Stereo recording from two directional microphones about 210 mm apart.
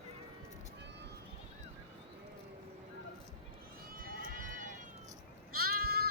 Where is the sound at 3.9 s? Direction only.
45° right (ahead or behind).